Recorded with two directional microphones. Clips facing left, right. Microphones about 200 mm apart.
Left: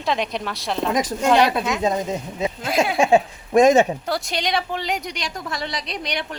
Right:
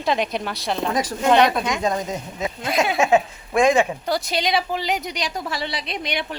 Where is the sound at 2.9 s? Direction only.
30° left (ahead or behind).